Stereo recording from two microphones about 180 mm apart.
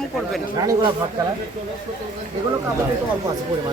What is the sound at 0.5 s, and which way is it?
Speech, 20° right (ahead or behind).